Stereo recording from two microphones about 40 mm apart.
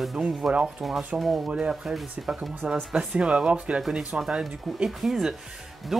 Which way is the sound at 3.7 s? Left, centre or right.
Right.